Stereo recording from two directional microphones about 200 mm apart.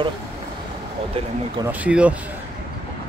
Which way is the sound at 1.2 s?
30° right (ahead or behind).